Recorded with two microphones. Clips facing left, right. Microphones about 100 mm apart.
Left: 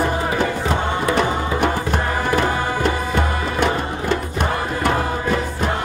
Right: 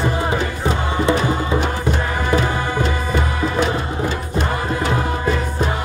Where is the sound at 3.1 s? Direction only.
55° left (ahead or behind).